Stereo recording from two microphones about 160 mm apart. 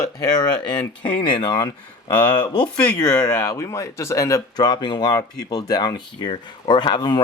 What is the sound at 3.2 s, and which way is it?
Speech, 20° left (ahead or behind).